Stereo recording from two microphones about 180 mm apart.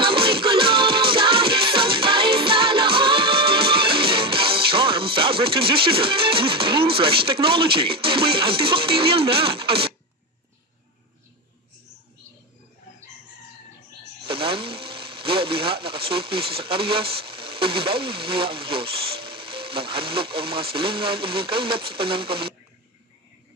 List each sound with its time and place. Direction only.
0.0 s music: 30° right (ahead or behind)
14.3 s speech: 30° right (ahead or behind)